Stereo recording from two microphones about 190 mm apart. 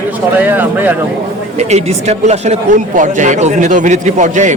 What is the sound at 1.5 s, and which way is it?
Speech, 35° right (ahead or behind).